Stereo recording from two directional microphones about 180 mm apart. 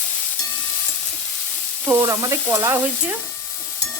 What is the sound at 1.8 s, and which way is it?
Stir, 10° right (ahead or behind).